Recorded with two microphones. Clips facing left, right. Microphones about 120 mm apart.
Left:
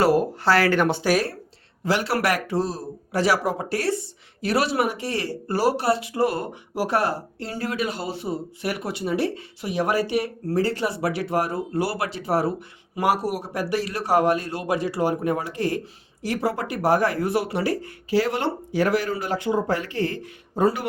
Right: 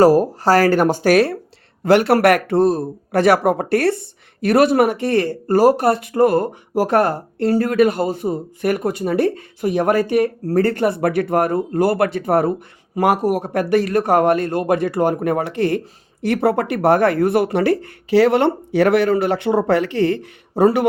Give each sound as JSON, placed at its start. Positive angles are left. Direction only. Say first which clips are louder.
{"t": 0.0, "sound": "speech", "louder": "right 7 dB", "side_deg": -40}
{"t": 1.1, "sound": "speech", "louder": "right 8 dB", "side_deg": -75}
{"t": 1.8, "sound": "speech", "louder": "right 10 dB", "side_deg": -55}